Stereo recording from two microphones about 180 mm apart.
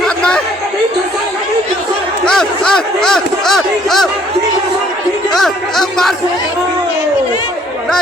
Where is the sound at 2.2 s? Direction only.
5° left (ahead or behind).